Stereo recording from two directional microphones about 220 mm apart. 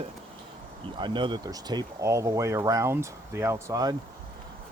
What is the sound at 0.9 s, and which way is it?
Speech, 20° right (ahead or behind).